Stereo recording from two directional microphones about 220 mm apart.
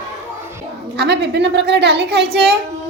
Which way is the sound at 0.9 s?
50° right (ahead or behind).